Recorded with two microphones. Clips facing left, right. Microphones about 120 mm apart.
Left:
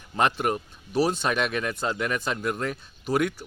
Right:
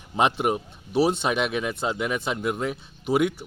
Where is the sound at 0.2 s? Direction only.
20° right (ahead or behind).